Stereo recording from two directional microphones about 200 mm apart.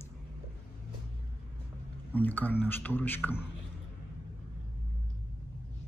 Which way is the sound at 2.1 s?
10° left (ahead or behind).